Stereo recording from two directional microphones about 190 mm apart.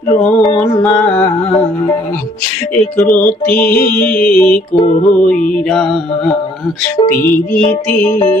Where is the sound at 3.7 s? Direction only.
50° left (ahead or behind).